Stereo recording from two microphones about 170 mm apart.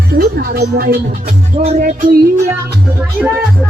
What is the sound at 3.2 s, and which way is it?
Speech, centre (ahead or behind).